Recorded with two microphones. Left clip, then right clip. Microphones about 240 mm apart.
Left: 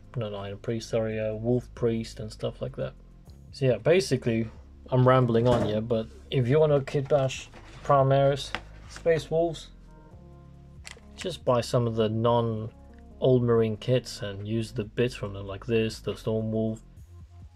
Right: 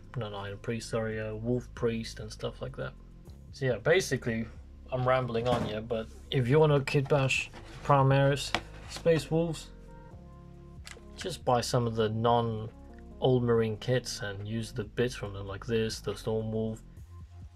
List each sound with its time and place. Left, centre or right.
0.1 s speech: centre
4.8 s a man's voice: left
6.2 s speech: centre
11.2 s speech: centre